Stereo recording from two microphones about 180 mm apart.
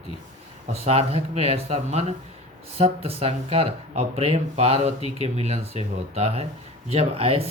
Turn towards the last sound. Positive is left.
turn(degrees=-35)  # may be behind; listen again after turning